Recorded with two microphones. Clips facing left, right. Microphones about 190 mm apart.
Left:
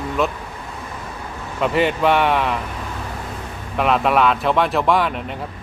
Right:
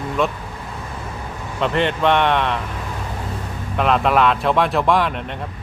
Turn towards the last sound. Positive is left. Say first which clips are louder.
# even
turn(degrees=0)  # may be behind; listen again after turning